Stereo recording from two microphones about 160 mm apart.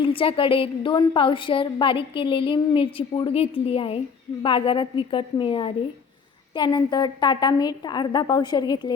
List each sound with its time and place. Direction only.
0.0 s a woman's voice: 35° left (ahead or behind)